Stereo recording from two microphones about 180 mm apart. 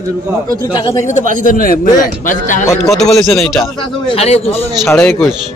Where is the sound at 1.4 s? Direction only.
50° left (ahead or behind).